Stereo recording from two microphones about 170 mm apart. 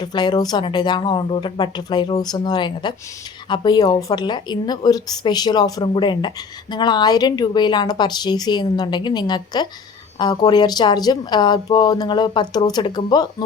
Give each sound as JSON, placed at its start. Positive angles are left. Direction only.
{"t": 0.0, "sound": "a woman's voice", "side_deg": 25}